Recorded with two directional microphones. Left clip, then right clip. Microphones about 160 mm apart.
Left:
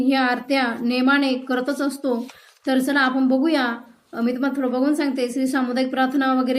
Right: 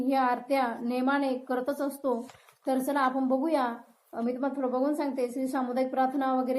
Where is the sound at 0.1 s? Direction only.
10° left (ahead or behind).